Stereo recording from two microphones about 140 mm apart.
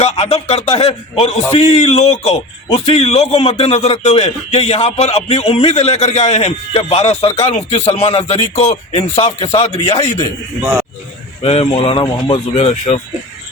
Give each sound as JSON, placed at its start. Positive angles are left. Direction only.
{"t": 0.0, "sound": "a man's voice", "side_deg": 45}
{"t": 10.6, "sound": "a man's voice", "side_deg": -15}
{"t": 11.4, "sound": "a man's voice", "side_deg": 45}